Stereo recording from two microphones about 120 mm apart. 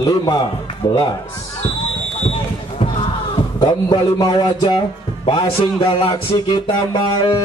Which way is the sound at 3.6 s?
35° left (ahead or behind).